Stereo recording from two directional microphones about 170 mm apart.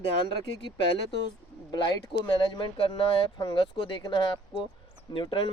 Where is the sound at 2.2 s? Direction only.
25° left (ahead or behind).